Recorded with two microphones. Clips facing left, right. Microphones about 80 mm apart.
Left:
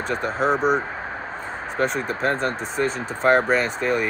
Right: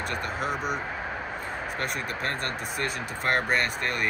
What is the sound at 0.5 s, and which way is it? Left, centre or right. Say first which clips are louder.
Speech: left 12 dB; left.